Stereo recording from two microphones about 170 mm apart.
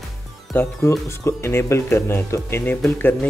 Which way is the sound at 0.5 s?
15° left (ahead or behind).